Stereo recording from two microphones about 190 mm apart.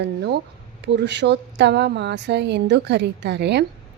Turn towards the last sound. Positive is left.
turn(degrees=-60)  # may be behind; listen again after turning